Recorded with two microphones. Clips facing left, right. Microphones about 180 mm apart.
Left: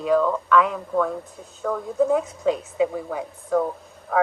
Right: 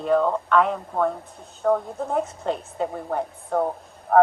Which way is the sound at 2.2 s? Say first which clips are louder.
Left 3 dB; centre (ahead or behind).